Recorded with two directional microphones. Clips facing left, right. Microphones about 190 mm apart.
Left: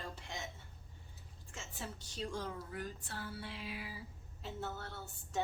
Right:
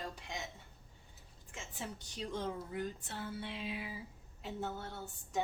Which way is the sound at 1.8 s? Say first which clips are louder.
Even; 15° right (ahead or behind).